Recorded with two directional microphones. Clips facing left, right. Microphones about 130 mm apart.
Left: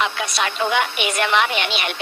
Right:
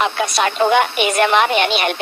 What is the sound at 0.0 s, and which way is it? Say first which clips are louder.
Speech: right 5 dB; 45° right (ahead or behind).